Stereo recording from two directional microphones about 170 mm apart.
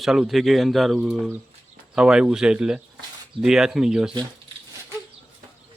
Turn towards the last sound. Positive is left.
turn(degrees=-5)  # may be behind; listen again after turning